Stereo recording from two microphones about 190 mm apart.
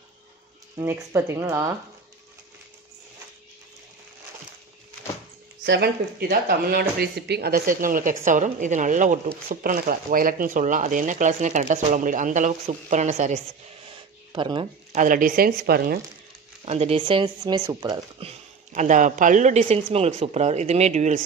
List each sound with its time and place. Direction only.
0.7 s speech: 15° right (ahead or behind)
5.7 s speech: 55° right (ahead or behind); by 13.4 s 35° right (ahead or behind)
14.3 s speech: 25° right (ahead or behind)
15.0 s speech: 45° right (ahead or behind)
16.6 s speech: 35° right (ahead or behind)
18.7 s speech: 40° right (ahead or behind)